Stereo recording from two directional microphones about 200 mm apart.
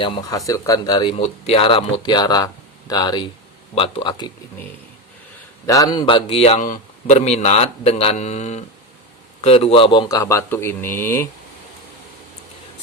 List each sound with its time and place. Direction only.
0.0 s a man's voice: 20° left (ahead or behind)
1.1 s speech: 30° left (ahead or behind)
5.6 s a man's voice: 15° left (ahead or behind)